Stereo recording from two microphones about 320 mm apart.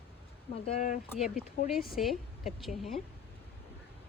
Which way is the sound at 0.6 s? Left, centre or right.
Left.